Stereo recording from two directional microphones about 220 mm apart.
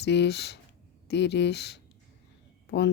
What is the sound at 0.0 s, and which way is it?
Speech, 50° left (ahead or behind).